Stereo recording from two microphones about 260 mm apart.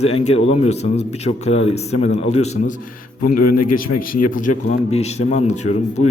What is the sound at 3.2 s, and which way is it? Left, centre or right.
Speech, left.